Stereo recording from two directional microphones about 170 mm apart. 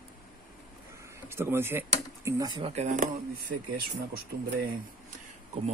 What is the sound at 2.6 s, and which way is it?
Speech, 40° right (ahead or behind).